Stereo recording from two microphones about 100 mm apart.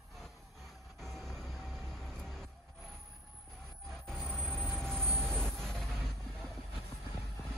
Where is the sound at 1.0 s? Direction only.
Centre (ahead or behind).